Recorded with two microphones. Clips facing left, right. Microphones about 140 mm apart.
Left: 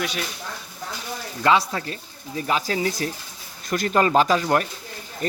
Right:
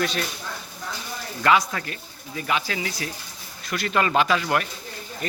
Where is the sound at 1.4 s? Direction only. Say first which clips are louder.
Left 1 dB; 25° left (ahead or behind).